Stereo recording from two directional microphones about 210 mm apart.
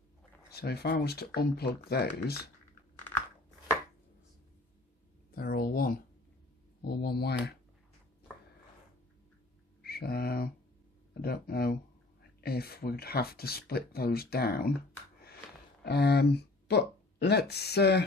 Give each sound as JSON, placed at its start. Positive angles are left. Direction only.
{"t": 0.5, "sound": "speech", "side_deg": 50}
{"t": 5.3, "sound": "a sound", "side_deg": 45}
{"t": 6.8, "sound": "speech", "side_deg": 50}
{"t": 9.8, "sound": "mantra", "side_deg": 45}
{"t": 11.1, "sound": "speech", "side_deg": 45}
{"t": 15.8, "sound": "speech", "side_deg": 50}